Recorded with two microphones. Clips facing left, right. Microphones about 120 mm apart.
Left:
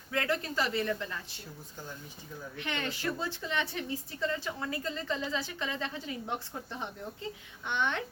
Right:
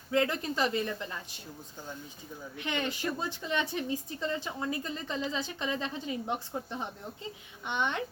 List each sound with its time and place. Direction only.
0.1 s a woman's voice: 20° right (ahead or behind)
2.6 s a woman's voice: 20° right (ahead or behind)